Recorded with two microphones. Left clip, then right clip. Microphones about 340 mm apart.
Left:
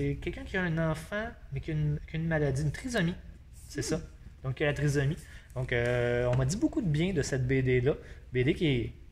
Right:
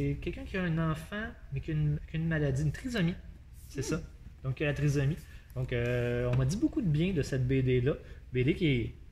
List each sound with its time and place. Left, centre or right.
0.2 s speech: centre
4.6 s speech: centre